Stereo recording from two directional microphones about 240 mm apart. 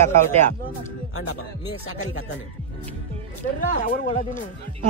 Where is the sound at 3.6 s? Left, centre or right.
Left.